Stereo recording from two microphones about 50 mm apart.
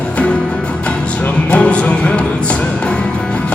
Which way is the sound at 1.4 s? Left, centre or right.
Left.